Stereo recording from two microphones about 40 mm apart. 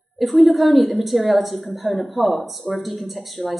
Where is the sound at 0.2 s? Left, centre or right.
Centre.